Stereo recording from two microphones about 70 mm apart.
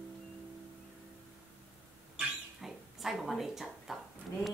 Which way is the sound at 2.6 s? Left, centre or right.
Centre.